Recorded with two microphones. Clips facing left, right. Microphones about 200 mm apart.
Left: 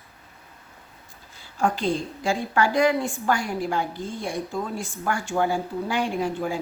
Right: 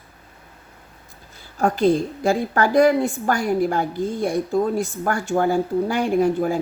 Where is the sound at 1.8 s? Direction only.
50° right (ahead or behind).